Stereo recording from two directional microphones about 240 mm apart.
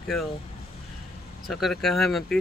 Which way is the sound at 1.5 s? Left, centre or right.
Centre.